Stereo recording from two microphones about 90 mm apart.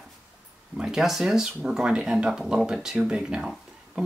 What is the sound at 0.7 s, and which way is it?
Speech, 5° right (ahead or behind).